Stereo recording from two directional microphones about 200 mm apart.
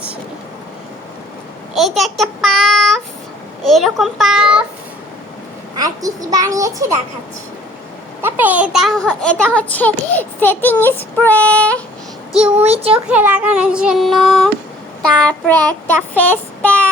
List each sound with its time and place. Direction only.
1.7 s child singing: centre (ahead or behind)
3.6 s a child's voice: centre (ahead or behind)
5.7 s a child's voice: 20° right (ahead or behind)
8.2 s a child's voice: 10° right (ahead or behind); by 9.9 s 5° left (ahead or behind)
10.2 s child singing: 10° left (ahead or behind)
12.3 s a child's voice: 5° right (ahead or behind)
12.6 s speech: 30° right (ahead or behind)
12.9 s a child's voice: 10° right (ahead or behind)
15.3 s child singing: 5° left (ahead or behind)